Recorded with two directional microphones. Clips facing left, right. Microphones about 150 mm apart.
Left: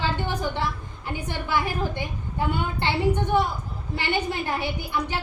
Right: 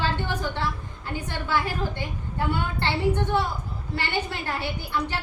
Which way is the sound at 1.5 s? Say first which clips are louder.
Left 1 dB; 15° left (ahead or behind).